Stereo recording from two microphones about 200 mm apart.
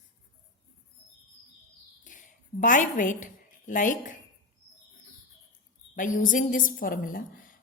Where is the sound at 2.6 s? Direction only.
40° left (ahead or behind).